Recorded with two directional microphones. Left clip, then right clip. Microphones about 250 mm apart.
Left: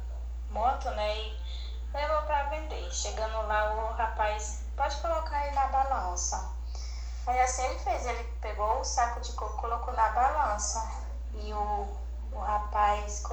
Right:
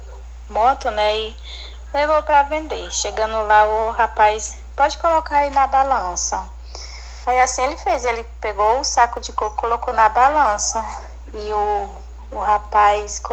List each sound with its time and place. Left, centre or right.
0.5 s speech: right